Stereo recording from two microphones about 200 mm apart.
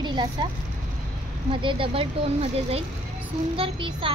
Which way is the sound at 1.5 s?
25° right (ahead or behind).